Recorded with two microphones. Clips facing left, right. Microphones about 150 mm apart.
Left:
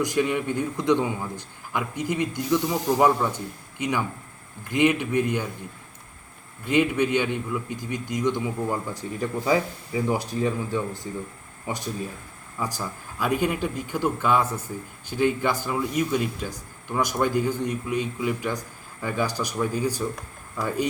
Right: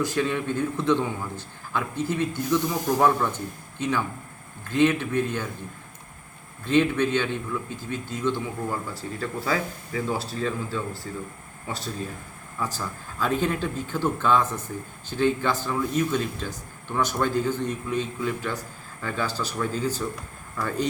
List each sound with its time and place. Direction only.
0.0 s a man's voice: 15° left (ahead or behind)
6.7 s a man's voice: 15° left (ahead or behind)